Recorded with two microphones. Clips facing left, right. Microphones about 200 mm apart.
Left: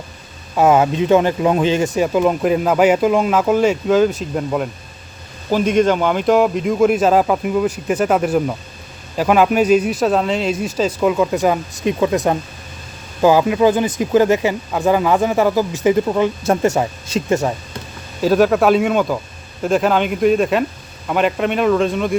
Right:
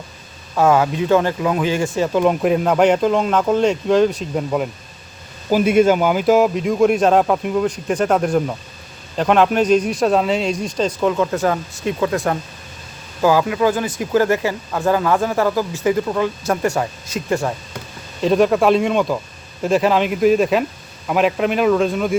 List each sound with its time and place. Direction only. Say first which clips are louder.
0.5 s speech: left 2 dB; 20° left (ahead or behind)
2.1 s speech: right 1 dB; centre (ahead or behind); by 17.5 s 20° left (ahead or behind)
18.2 s speech: left 1 dB; 5° left (ahead or behind)